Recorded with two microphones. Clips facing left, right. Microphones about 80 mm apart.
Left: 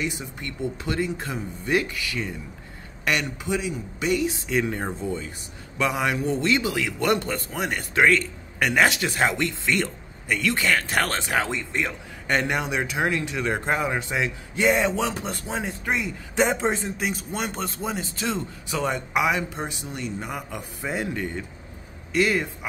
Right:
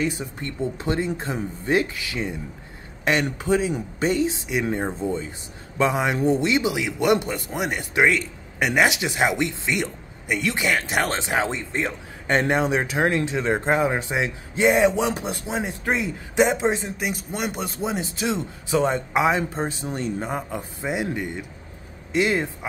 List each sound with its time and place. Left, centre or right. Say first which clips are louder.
0.0 s a man's voice: right 4 dB; right; by 15.7 s centre
15.8 s a man's voice: right 3 dB; right
16.3 s a man's voice: right 3 dB; centre; by 20.9 s right
20.9 s a man's voice: right 2 dB; centre